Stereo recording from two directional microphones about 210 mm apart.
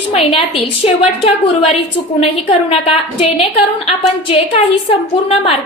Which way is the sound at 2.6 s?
30° left (ahead or behind).